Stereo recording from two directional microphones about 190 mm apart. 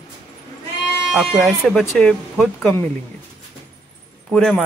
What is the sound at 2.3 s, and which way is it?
Speech, 5° right (ahead or behind).